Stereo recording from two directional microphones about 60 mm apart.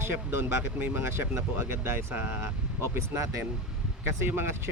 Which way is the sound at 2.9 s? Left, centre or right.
Right.